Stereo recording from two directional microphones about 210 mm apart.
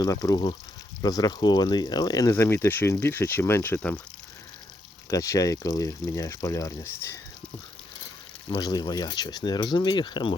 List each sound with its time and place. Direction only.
0.0 s speech: 15° left (ahead or behind)
5.1 s speech: 15° left (ahead or behind)
8.4 s speech: 20° left (ahead or behind)